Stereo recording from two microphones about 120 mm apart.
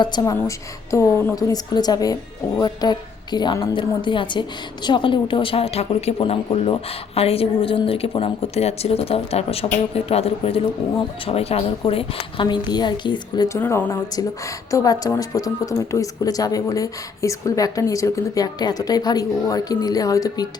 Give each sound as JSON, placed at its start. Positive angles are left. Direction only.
{"t": 0.0, "sound": "a woman's voice", "side_deg": 40}
{"t": 0.3, "sound": "a woman's voice", "side_deg": 25}
{"t": 13.5, "sound": "speech", "side_deg": 20}